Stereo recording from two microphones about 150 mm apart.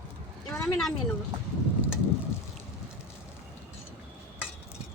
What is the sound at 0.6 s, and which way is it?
Speech, centre (ahead or behind).